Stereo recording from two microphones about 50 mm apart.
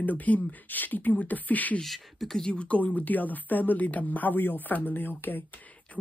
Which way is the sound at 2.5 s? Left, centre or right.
Left.